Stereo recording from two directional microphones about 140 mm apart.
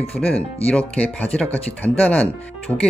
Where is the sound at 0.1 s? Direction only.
10° left (ahead or behind).